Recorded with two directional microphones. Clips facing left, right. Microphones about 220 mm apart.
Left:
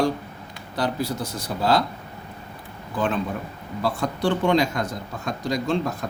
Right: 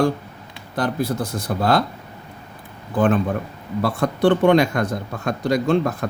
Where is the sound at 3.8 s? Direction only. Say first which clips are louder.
Right 6 dB; 60° right (ahead or behind).